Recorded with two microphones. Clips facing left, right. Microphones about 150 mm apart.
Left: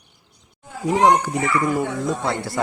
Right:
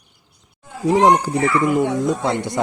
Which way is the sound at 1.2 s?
30° right (ahead or behind).